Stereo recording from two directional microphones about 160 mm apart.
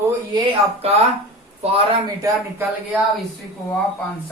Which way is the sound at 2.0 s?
20° right (ahead or behind).